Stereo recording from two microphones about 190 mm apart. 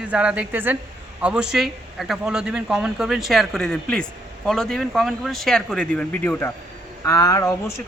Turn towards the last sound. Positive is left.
turn(degrees=15)  # may be behind; listen again after turning